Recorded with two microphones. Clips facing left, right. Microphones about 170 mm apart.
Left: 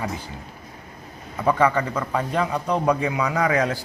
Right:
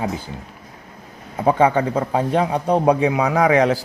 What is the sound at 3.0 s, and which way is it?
Speech, 90° right.